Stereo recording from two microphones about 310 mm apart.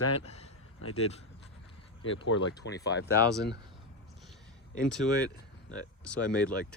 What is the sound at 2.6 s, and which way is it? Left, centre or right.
Speech, left.